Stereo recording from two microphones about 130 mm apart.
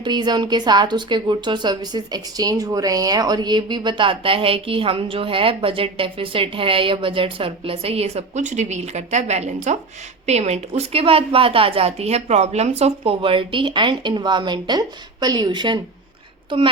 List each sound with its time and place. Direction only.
0.0 s a woman's voice: 35° right (ahead or behind)